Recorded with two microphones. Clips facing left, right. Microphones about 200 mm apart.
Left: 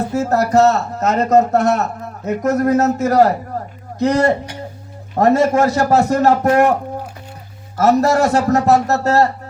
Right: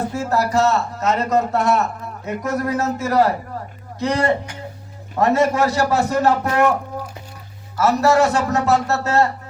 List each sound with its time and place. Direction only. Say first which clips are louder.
0.1 s a man's voice: left 5 dB; 40° left (ahead or behind)
7.8 s speech: left 2 dB; 40° left (ahead or behind)